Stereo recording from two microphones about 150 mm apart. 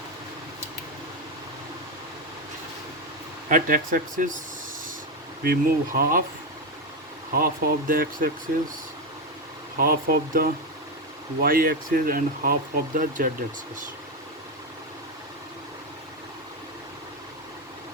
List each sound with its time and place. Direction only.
3.5 s speech: 65° right (ahead or behind)
5.4 s speech: 80° right
7.3 s speech: 75° right (ahead or behind)
9.8 s speech: 75° right (ahead or behind)